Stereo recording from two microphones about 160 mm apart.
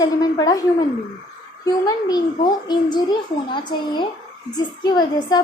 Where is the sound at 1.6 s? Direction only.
25° left (ahead or behind).